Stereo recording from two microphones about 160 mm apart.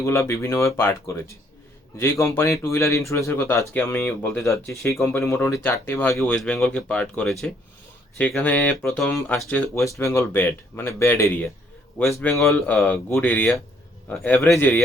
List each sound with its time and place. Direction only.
0.0 s speech: 15° left (ahead or behind)
4.4 s speech: centre (ahead or behind)
4.9 s speech: 15° left (ahead or behind)